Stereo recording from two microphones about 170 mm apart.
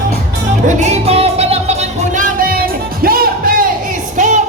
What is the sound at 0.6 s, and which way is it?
Music, 40° right (ahead or behind).